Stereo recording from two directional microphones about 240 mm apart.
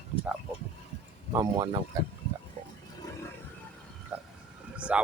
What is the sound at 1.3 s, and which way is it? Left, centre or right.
Speech, centre.